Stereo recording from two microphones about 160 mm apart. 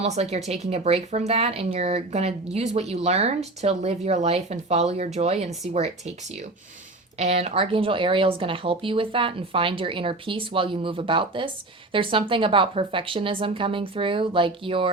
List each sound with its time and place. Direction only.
0.0 s speech: 45° right (ahead or behind)